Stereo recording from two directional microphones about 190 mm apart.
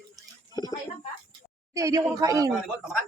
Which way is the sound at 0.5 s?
20° left (ahead or behind).